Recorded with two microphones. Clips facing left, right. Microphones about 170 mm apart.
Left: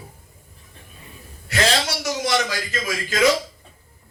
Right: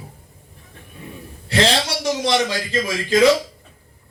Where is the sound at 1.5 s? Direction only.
30° right (ahead or behind).